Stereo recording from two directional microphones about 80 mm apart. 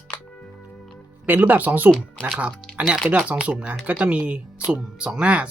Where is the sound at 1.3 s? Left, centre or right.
Right.